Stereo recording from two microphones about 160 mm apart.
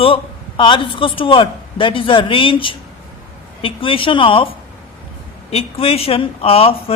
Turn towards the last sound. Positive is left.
turn(degrees=35)  # may be behind; listen again after turning